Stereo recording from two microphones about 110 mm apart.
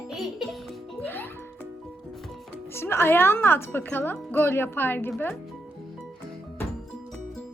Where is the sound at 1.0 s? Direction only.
20° left (ahead or behind).